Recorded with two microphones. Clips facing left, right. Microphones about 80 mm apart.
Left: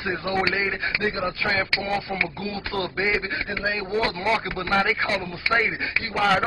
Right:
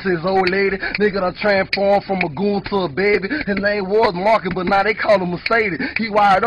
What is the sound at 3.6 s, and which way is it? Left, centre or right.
A man's voice, right.